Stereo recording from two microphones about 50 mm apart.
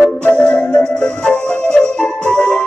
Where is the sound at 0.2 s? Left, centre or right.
Left.